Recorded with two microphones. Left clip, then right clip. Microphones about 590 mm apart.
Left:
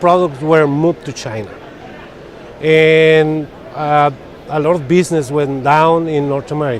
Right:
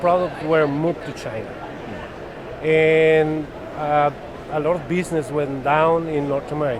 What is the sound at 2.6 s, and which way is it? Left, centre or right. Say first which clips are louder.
A man's voice: left 6 dB; left.